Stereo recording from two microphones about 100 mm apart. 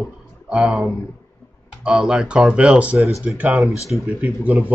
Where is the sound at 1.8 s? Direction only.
10° right (ahead or behind).